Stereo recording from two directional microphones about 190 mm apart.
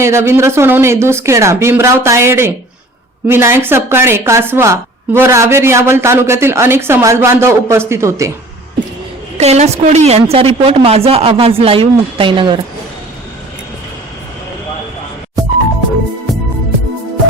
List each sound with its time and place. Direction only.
0.0 s speech: 15° right (ahead or behind)
9.4 s a woman's voice: 35° right (ahead or behind)
15.4 s music: 20° right (ahead or behind)